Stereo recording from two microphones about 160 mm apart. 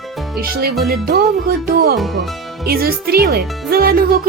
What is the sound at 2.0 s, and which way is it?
Speech, centre (ahead or behind).